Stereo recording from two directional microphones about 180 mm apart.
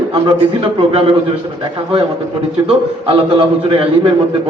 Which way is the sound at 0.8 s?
30° right (ahead or behind).